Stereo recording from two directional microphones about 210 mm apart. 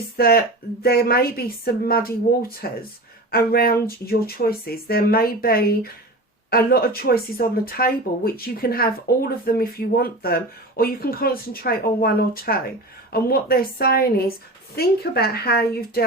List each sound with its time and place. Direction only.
0.2 s speech: 45° left (ahead or behind)